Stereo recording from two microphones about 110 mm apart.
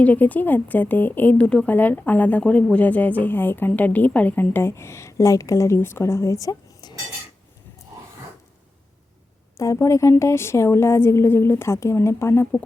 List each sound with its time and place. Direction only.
0.0 s speech: 15° left (ahead or behind); by 6.9 s 35° left (ahead or behind)
9.6 s a woman's voice: 30° left (ahead or behind)